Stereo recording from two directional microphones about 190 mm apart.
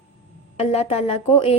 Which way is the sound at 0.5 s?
30° left (ahead or behind).